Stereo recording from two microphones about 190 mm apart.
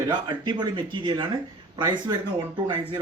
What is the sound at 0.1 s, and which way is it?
Speech, 25° right (ahead or behind).